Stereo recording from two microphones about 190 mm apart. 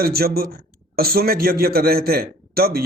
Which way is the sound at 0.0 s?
55° right (ahead or behind).